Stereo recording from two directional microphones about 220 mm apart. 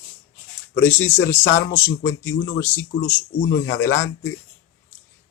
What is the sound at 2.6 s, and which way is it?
Speech, 10° left (ahead or behind).